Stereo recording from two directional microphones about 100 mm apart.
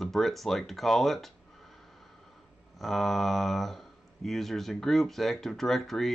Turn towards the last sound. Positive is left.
turn(degrees=5)  # may be behind; listen again after turning